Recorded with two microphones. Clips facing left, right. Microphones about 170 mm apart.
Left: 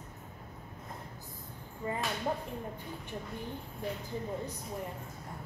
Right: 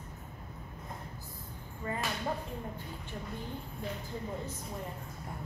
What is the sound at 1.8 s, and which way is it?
Speech, 20° left (ahead or behind).